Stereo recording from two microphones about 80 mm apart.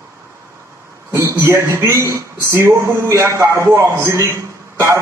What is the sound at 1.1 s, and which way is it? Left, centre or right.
A man's voice, right.